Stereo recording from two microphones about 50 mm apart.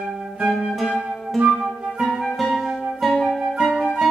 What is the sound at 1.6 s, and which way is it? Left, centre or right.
Flute, centre.